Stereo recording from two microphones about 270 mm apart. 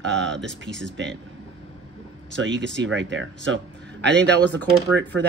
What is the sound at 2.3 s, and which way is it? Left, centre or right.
Speech, right.